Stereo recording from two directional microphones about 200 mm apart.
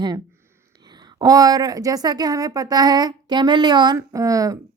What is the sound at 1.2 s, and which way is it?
Speech, 20° right (ahead or behind).